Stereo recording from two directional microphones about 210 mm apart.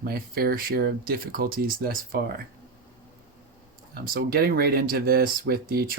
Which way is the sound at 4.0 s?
45° right (ahead or behind).